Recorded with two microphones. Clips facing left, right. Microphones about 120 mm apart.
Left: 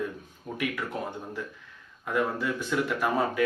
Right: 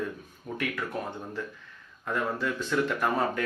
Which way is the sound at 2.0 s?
10° left (ahead or behind).